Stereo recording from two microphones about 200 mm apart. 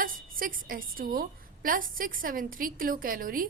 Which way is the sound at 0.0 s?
45° right (ahead or behind).